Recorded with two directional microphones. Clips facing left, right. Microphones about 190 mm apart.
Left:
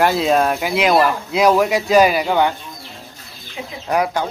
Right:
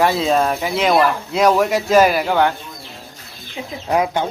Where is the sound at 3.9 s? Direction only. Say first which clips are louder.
Right 1 dB; 20° right (ahead or behind).